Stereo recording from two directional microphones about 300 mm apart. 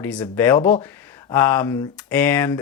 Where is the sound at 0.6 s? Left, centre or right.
Left.